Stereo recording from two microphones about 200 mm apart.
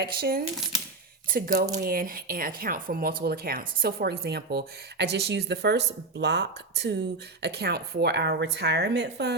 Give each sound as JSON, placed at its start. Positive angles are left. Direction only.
{"t": 0.0, "sound": "speech", "side_deg": -50}